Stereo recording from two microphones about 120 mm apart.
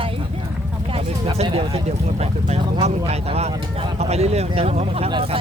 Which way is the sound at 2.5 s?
65° right (ahead or behind).